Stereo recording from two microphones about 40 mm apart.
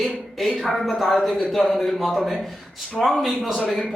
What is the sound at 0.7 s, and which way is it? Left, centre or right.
Speech, centre.